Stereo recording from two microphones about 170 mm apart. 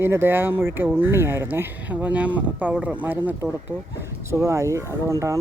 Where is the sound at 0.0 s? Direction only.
15° right (ahead or behind).